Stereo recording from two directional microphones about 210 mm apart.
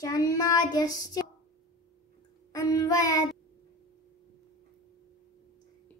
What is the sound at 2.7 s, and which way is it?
Speech, 15° left (ahead or behind).